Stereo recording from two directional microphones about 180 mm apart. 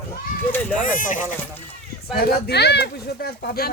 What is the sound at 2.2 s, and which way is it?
Speech, 65° left (ahead or behind).